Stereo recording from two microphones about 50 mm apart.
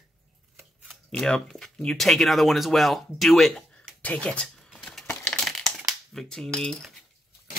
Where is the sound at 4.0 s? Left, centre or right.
Left.